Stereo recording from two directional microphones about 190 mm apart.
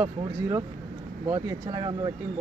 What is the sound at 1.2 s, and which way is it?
Speech, 20° right (ahead or behind).